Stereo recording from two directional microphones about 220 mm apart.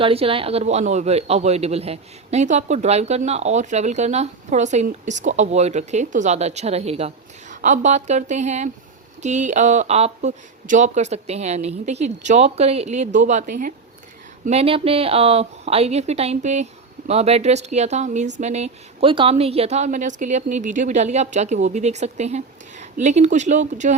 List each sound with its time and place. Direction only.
0.0 s speech: 25° right (ahead or behind)
14.4 s speech: 25° right (ahead or behind)